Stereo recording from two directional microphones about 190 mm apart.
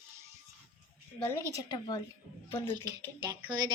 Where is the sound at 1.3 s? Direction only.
15° left (ahead or behind).